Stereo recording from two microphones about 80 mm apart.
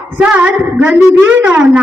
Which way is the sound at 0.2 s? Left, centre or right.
Centre.